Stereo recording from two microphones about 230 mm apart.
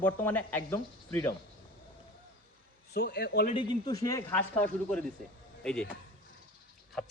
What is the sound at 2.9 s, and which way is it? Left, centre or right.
Speech, left.